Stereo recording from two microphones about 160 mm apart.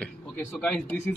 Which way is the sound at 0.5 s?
5° left (ahead or behind).